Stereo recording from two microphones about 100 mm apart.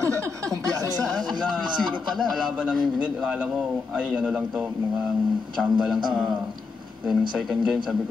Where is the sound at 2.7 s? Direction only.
10° right (ahead or behind).